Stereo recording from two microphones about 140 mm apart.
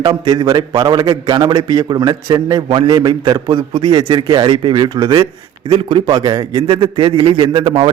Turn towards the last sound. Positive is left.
turn(degrees=-35)  # may be behind; listen again after turning